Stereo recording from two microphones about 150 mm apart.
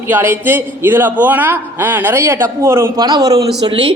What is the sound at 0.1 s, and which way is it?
A man's voice, 15° right (ahead or behind).